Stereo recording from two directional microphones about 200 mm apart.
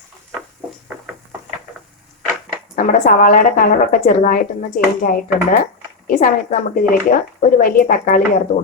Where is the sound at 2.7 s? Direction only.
40° left (ahead or behind).